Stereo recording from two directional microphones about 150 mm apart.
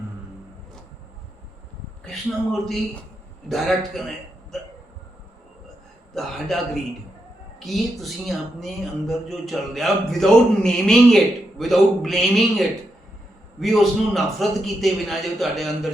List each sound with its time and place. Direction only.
2.0 s speech: centre (ahead or behind)
4.5 s hiccup: centre (ahead or behind)
6.1 s speech: centre (ahead or behind)
7.6 s speech: centre (ahead or behind)